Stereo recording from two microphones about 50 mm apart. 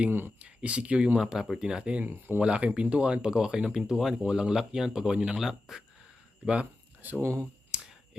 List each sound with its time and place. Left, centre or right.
0.3 s speech: right
2.0 s speech: right
2.4 s speech: right; by 5.8 s centre
6.4 s speech: right
7.2 s speech: right
7.7 s a sound: centre